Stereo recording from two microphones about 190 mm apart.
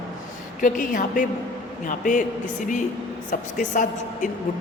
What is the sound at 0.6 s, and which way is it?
A woman's voice, 45° left (ahead or behind).